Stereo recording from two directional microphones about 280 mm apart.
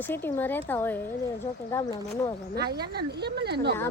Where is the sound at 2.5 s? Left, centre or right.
Right.